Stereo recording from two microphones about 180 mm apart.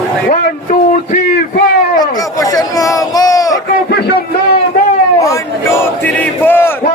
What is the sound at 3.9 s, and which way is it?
Music, 60° left (ahead or behind).